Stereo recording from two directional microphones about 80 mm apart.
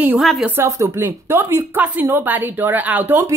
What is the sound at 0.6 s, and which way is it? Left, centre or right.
A woman's voice, right.